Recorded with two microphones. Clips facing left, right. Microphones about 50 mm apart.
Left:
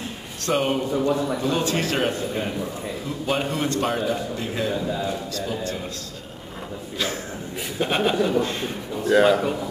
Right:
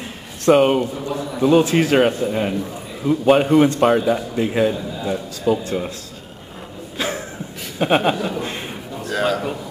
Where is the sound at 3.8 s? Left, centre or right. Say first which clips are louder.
Right 8 dB; centre.